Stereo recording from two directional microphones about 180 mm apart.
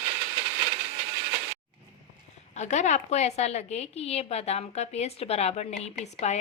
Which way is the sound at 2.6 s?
40° left (ahead or behind).